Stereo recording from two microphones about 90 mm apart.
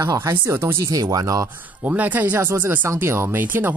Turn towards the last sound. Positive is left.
turn(degrees=-25)  # may be behind; listen again after turning